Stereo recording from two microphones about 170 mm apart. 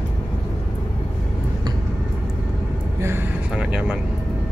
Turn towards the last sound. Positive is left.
turn(degrees=-5)  # may be behind; listen again after turning